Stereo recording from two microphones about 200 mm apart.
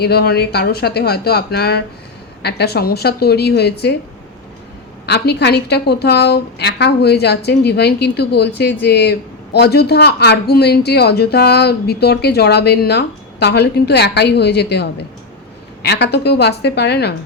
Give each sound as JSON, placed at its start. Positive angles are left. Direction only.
{"t": 0.0, "sound": "a woman's voice", "side_deg": 55}
{"t": 5.0, "sound": "a woman's voice", "side_deg": 55}